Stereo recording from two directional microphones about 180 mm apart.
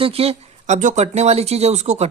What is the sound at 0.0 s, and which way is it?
Speech, 35° right (ahead or behind).